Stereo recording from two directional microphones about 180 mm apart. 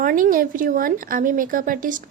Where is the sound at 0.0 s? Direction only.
50° right (ahead or behind).